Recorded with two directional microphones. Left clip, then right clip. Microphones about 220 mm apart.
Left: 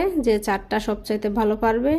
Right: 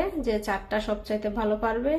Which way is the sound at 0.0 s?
40° left (ahead or behind).